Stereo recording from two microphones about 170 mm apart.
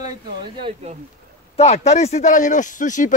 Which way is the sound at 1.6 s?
40° left (ahead or behind).